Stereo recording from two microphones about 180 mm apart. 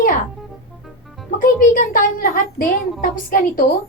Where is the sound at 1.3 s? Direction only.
50° left (ahead or behind).